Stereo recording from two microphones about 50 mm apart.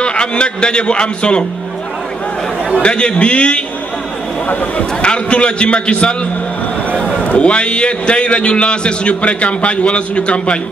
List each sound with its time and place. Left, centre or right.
0.0 s a man's voice: centre
2.8 s a man's voice: centre
5.0 s a man's voice: left